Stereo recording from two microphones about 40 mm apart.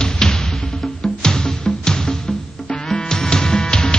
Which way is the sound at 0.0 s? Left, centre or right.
Centre.